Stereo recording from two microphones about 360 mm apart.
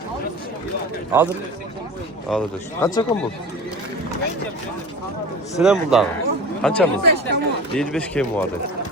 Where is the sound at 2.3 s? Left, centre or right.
Centre.